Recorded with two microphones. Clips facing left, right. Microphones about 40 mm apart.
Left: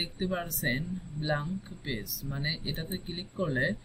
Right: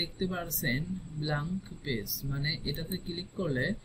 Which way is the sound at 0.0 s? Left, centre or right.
Left.